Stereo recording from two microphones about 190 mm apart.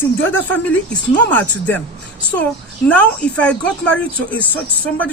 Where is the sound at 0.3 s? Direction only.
10° left (ahead or behind).